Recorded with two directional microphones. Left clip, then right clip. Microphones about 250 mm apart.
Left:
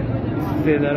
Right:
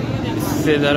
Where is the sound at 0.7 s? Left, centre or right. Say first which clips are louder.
Right 3 dB; centre.